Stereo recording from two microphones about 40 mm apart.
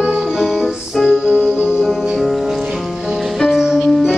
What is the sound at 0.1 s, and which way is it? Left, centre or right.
Music, centre.